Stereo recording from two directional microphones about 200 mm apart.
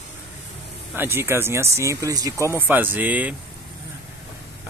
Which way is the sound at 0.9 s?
10° right (ahead or behind).